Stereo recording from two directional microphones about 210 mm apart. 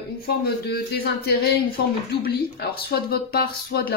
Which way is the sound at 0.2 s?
45° left (ahead or behind).